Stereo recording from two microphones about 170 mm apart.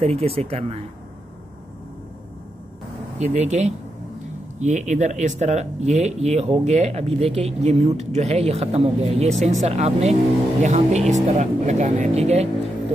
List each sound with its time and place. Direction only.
0.0 s speech: 35° right (ahead or behind)
3.2 s speech: 40° right (ahead or behind)